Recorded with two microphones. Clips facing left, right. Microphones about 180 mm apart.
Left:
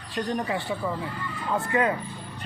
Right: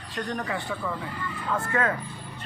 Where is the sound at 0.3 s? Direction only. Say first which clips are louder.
Left 3 dB; 20° left (ahead or behind).